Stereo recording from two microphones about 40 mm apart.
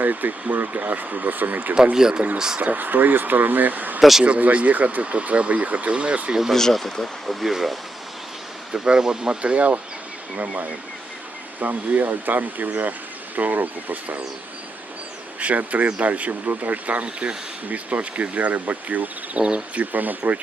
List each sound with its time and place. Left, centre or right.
0.0 s speech: right
1.7 s speech: right
2.6 s speech: right
6.5 s speech: centre
7.4 s speech: centre
8.7 s speech: right
9.4 s speech: right
15.4 s speech: right
19.4 s speech: right
19.7 s speech: right